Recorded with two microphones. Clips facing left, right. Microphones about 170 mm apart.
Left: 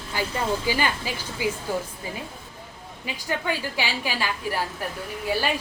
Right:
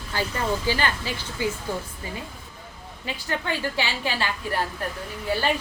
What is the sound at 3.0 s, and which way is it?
A woman's voice, 10° left (ahead or behind).